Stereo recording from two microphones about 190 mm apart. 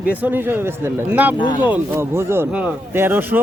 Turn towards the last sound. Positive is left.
turn(degrees=-10)  # may be behind; listen again after turning